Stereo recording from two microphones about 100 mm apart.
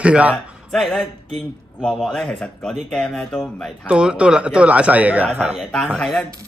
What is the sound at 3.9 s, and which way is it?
Speech, 10° right (ahead or behind).